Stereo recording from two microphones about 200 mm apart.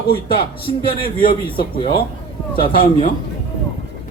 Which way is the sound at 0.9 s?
45° left (ahead or behind).